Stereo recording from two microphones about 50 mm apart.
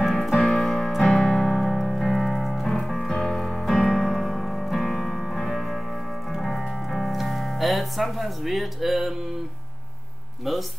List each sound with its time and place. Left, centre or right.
0.0 s keyboard: centre
0.4 s keyboard: left
0.7 s piano: centre
2.0 s music: centre